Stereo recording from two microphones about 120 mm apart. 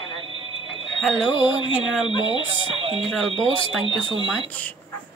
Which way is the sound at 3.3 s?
45° left (ahead or behind).